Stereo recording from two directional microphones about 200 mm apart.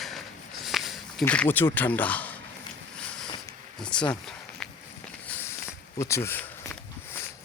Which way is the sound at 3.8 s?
5° left (ahead or behind).